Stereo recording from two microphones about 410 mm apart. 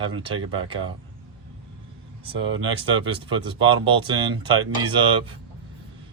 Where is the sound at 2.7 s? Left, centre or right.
Centre.